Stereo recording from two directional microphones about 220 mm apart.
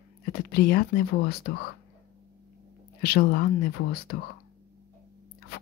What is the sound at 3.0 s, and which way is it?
Speech, 45° left (ahead or behind).